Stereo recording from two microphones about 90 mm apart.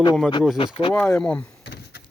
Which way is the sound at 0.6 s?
80° left.